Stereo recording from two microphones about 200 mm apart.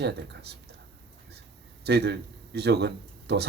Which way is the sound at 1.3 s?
55° right (ahead or behind).